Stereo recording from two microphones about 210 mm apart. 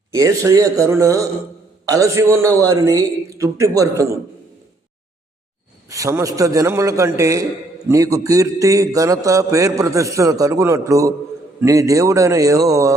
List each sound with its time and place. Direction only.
0.1 s a man's voice: 15° right (ahead or behind)
5.9 s a man's voice: 15° right (ahead or behind)